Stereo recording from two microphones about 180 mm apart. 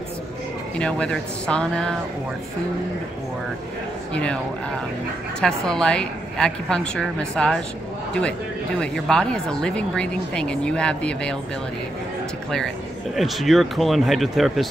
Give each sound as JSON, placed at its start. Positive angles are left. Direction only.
{"t": 0.7, "sound": "speech", "side_deg": 5}
{"t": 4.1, "sound": "speech", "side_deg": 5}
{"t": 5.4, "sound": "speech", "side_deg": 5}
{"t": 12.4, "sound": "speech", "side_deg": 0}